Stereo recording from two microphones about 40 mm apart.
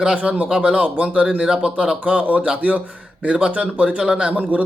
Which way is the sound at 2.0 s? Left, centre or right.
Right.